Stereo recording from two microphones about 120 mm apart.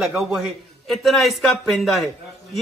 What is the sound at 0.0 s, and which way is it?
A man's voice, centre (ahead or behind).